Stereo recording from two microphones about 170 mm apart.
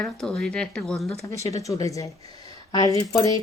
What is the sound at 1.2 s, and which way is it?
Speech, 20° left (ahead or behind).